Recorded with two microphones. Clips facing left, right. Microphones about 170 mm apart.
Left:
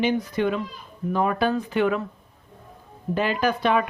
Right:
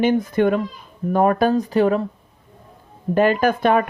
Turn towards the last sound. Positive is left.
turn(degrees=-50)  # may be behind; listen again after turning